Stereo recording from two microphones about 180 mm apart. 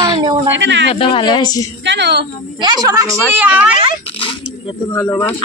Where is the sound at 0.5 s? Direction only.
90° right.